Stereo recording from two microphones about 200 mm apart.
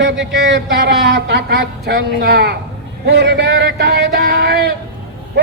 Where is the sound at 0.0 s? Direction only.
65° right (ahead or behind).